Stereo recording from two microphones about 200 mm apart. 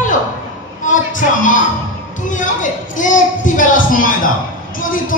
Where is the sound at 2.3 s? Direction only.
40° left (ahead or behind).